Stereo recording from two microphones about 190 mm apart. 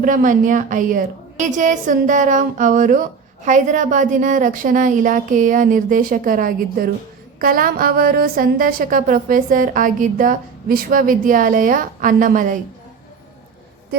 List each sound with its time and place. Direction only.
0.0 s a woman's voice: 45° right (ahead or behind)